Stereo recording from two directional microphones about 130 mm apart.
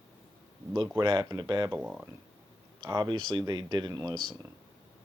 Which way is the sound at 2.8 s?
35° right (ahead or behind).